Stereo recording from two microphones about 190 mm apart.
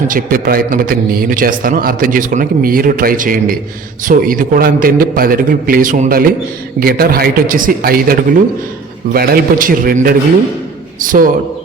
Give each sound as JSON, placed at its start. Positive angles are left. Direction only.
{"t": 0.1, "sound": "a man's voice", "side_deg": -50}